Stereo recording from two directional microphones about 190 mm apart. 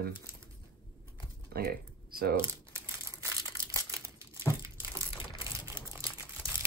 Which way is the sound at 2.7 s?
15° right (ahead or behind).